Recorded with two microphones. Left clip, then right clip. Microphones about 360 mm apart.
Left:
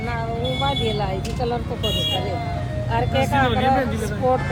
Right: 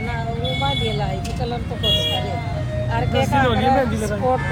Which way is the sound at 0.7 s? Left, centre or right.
Centre.